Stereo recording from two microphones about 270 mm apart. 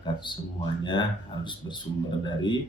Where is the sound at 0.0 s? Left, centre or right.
Centre.